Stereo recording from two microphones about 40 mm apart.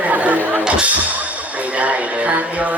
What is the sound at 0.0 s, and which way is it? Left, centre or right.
Music, right.